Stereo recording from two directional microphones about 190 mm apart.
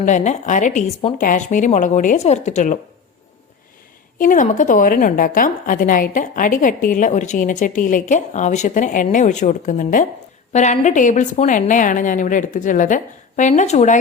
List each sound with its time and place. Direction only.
0.0 s a woman's voice: 40° left (ahead or behind)
4.2 s a woman's voice: 45° left (ahead or behind)